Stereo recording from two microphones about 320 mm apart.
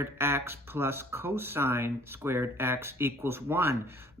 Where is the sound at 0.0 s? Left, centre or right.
Centre.